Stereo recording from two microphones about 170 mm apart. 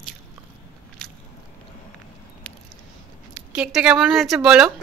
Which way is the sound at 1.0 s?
5° left (ahead or behind).